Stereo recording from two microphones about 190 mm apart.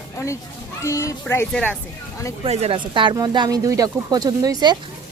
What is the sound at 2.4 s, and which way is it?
Speech, 35° right (ahead or behind).